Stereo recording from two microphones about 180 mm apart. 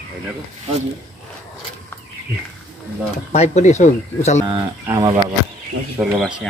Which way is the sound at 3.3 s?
40° left (ahead or behind).